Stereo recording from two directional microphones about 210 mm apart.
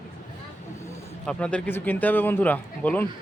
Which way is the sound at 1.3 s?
5° left (ahead or behind).